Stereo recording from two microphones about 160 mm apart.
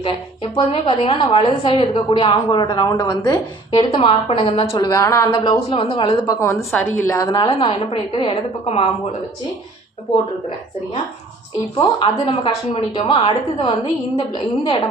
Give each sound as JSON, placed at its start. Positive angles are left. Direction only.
{"t": 0.5, "sound": "a woman's voice", "side_deg": 35}
{"t": 4.9, "sound": "a woman's voice", "side_deg": 20}
{"t": 7.3, "sound": "a woman's voice", "side_deg": 30}
{"t": 11.8, "sound": "a woman's voice", "side_deg": 30}